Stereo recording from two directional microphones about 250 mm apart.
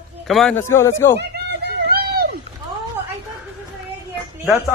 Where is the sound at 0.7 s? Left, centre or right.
Centre.